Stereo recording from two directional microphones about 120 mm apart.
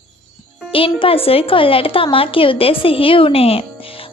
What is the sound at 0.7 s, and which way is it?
A woman's voice, 50° left (ahead or behind).